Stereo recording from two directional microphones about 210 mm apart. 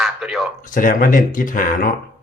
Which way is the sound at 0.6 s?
40° left (ahead or behind).